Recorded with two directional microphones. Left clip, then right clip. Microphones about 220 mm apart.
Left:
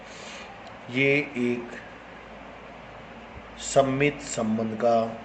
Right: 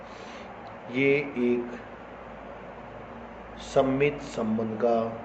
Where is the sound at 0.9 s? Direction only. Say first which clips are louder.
Left 1 dB; 40° left (ahead or behind).